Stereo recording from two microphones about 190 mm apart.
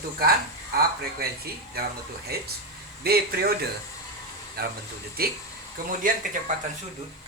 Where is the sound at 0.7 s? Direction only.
55° right (ahead or behind).